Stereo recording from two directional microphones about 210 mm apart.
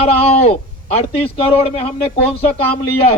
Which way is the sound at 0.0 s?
30° left (ahead or behind).